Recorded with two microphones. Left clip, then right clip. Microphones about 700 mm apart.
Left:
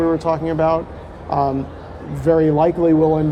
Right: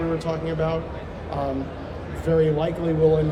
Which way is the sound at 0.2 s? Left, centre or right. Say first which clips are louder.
Left 8 dB; left.